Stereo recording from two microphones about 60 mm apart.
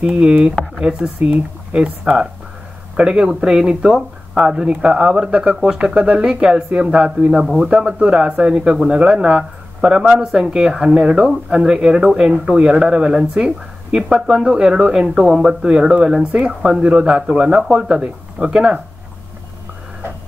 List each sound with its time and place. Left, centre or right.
0.0 s speech: right